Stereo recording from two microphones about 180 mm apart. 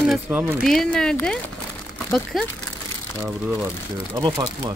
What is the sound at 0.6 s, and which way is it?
Speech, 5° left (ahead or behind).